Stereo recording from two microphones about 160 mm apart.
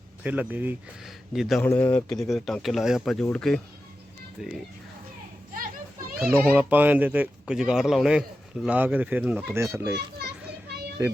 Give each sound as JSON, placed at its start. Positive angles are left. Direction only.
{"t": 0.2, "sound": "speech", "side_deg": -10}
{"t": 1.6, "sound": "speech", "side_deg": 10}
{"t": 2.1, "sound": "speech", "side_deg": 0}
{"t": 6.4, "sound": "speech", "side_deg": -10}
{"t": 9.9, "sound": "children playing", "side_deg": -90}